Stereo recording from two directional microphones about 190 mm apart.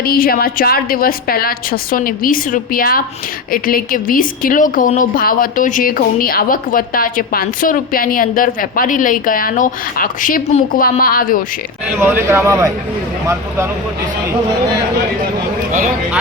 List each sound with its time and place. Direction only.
0.0 s a woman's voice: 50° left (ahead or behind)
11.9 s speech: 10° right (ahead or behind)